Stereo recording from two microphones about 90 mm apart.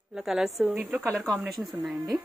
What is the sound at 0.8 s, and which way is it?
Speech, 20° right (ahead or behind).